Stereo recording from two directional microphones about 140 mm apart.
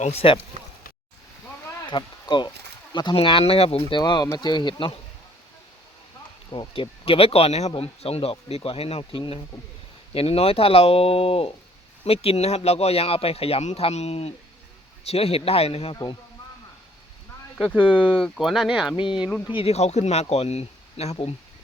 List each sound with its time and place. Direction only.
0.0 s speech: 45° left (ahead or behind)
1.9 s speech: 35° left (ahead or behind)
3.2 s speech: 45° left (ahead or behind)
6.5 s speech: 40° left (ahead or behind)
17.8 s speech: 5° right (ahead or behind)
18.9 s speech: 35° left (ahead or behind)
19.5 s speech: 50° left (ahead or behind)